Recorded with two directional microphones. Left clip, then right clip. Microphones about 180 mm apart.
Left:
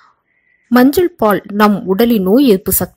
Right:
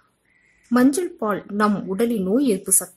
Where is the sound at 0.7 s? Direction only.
35° left (ahead or behind).